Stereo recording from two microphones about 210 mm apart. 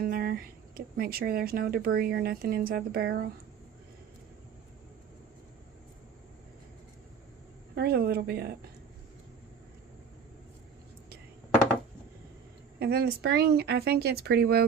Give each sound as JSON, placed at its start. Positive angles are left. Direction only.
{"t": 0.0, "sound": "speech", "side_deg": -45}
{"t": 7.8, "sound": "speech", "side_deg": -50}
{"t": 12.8, "sound": "speech", "side_deg": -50}